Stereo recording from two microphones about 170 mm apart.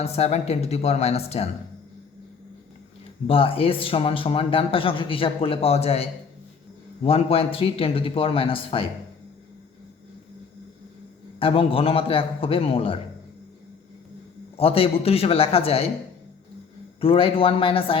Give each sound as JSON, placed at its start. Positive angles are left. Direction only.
{"t": 0.0, "sound": "speech", "side_deg": 40}
{"t": 3.2, "sound": "speech", "side_deg": 35}
{"t": 11.3, "sound": "speech", "side_deg": 35}
{"t": 14.5, "sound": "speech", "side_deg": 35}
{"t": 17.0, "sound": "speech", "side_deg": 35}